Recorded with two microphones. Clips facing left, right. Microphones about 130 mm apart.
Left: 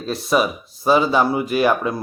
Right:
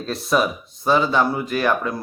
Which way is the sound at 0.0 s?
Centre (ahead or behind).